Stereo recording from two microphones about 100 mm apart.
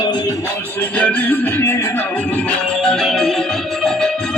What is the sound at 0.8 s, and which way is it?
Music, 15° left (ahead or behind).